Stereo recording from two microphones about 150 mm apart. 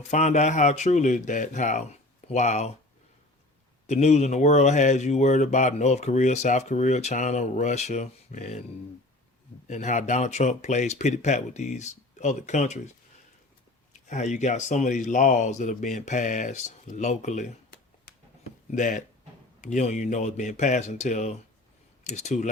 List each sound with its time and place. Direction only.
0.0 s speech: 50° left (ahead or behind)
3.8 s speech: 50° left (ahead or behind)
9.6 s speech: 50° left (ahead or behind)
14.1 s speech: 50° left (ahead or behind)